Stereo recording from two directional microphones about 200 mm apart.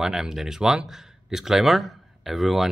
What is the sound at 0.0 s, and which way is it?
A man's voice, centre (ahead or behind).